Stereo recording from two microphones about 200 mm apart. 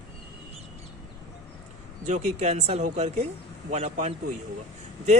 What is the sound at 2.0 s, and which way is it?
Speech, 35° right (ahead or behind).